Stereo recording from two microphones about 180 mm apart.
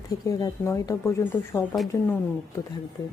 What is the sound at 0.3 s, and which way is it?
A woman's voice, 20° left (ahead or behind).